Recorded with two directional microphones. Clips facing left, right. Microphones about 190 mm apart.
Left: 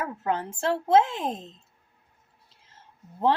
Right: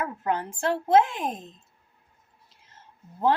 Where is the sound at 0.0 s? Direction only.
25° left (ahead or behind).